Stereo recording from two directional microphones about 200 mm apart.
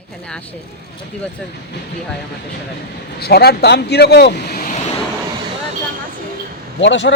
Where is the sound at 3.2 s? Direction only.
55° left (ahead or behind).